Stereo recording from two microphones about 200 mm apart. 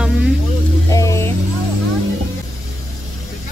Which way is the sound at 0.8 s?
15° left (ahead or behind).